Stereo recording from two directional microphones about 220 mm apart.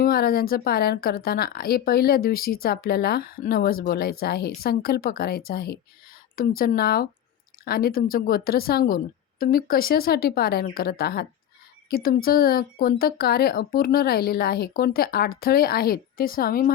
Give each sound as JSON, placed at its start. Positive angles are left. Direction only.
{"t": 0.0, "sound": "speech", "side_deg": 45}